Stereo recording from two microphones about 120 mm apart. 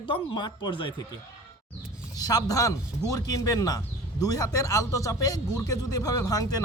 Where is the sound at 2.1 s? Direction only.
30° left (ahead or behind).